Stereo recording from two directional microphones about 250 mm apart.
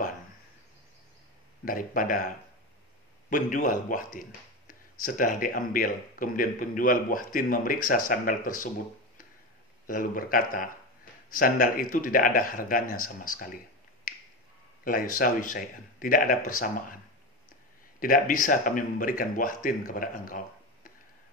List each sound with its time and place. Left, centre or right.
1.6 s speech: left
9.8 s speech: left
12.8 s speech: left
13.3 s speech: left
14.9 s speech: left
18.0 s speech: left